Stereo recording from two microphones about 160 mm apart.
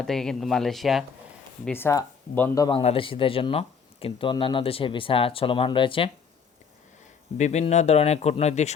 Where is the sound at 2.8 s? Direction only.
35° left (ahead or behind).